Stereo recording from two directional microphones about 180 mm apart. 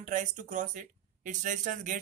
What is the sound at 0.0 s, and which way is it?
Speech, 45° right (ahead or behind).